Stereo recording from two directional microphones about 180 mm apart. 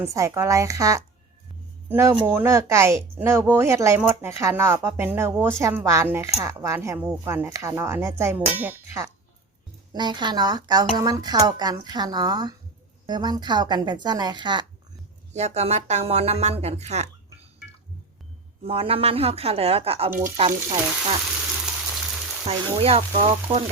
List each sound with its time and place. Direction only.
0.0 s speech: 15° right (ahead or behind)
9.9 s speech: 25° right (ahead or behind)
15.3 s speech: 40° right (ahead or behind)
18.6 s speech: 30° right (ahead or behind)
22.4 s speech: 35° right (ahead or behind)